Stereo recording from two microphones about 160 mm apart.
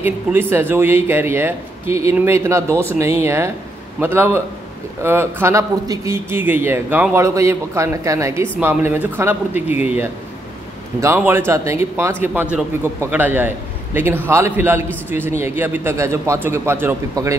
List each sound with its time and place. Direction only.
0.0 s a man's voice: 15° right (ahead or behind)
11.1 s a man's voice: 15° right (ahead or behind)